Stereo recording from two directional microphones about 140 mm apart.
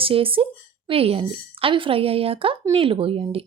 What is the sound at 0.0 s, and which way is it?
A woman's voice, 40° right (ahead or behind).